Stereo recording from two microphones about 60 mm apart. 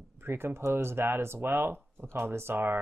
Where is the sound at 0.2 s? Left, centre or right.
Right.